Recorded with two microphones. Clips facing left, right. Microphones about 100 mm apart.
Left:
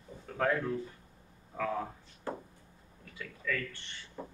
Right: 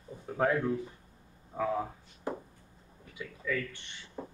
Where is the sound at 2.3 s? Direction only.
15° right (ahead or behind).